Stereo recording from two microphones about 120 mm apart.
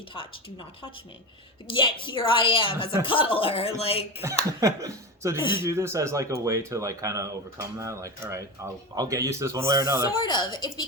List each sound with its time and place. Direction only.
1.6 s a woman's voice: 40° left (ahead or behind)
4.2 s speech: 25° right (ahead or behind)
5.4 s speech: 40° left (ahead or behind)
5.6 s speech: 25° right (ahead or behind)
10.2 s speech: 35° left (ahead or behind)